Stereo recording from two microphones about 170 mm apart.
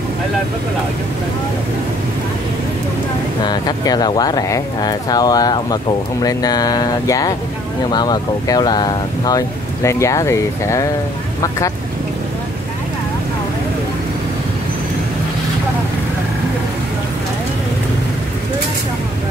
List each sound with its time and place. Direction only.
3.4 s speech: 25° left (ahead or behind)